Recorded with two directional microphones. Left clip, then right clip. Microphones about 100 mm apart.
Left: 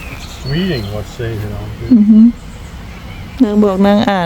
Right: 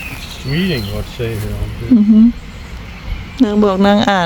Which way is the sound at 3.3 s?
20° left (ahead or behind).